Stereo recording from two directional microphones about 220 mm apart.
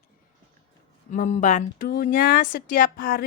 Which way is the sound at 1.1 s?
35° left (ahead or behind).